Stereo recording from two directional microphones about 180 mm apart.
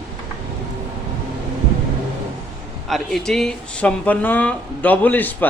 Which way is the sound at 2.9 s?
Centre (ahead or behind).